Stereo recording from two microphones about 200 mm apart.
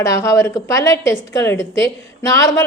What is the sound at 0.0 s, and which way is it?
A woman's voice, 15° left (ahead or behind).